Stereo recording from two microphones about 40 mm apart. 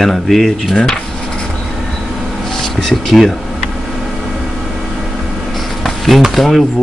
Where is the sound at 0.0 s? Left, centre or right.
Centre.